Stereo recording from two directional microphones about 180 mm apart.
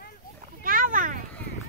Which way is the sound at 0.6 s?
50° right (ahead or behind).